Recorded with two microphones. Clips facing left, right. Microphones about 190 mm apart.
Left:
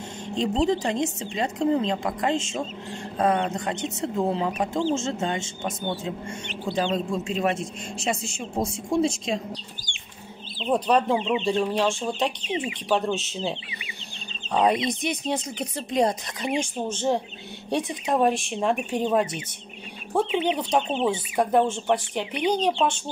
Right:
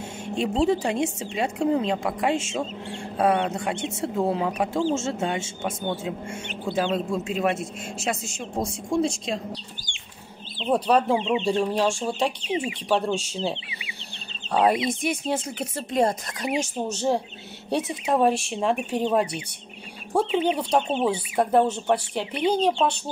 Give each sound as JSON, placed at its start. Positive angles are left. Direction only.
{"t": 0.3, "sound": "a man's voice", "side_deg": -10}
{"t": 10.7, "sound": "a man's voice", "side_deg": -5}
{"t": 11.1, "sound": "speech", "side_deg": -25}
{"t": 11.4, "sound": "a man's voice", "side_deg": -10}
{"t": 20.4, "sound": "a man's voice", "side_deg": -5}